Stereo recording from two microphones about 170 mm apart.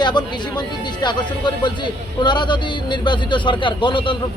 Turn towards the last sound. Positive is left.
turn(degrees=30)  # may be behind; listen again after turning